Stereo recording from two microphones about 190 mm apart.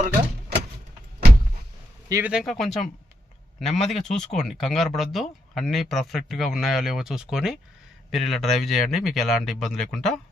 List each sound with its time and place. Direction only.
2.0 s speech: 15° right (ahead or behind)
2.3 s speech: centre (ahead or behind)